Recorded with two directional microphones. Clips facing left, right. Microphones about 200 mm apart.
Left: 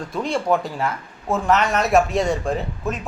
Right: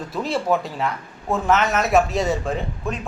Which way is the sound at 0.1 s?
5° right (ahead or behind).